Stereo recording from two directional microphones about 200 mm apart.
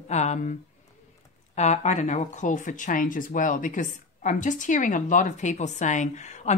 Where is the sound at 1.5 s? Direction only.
35° left (ahead or behind).